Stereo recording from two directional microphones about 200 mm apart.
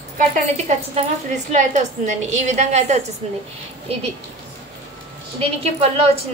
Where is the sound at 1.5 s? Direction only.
35° right (ahead or behind).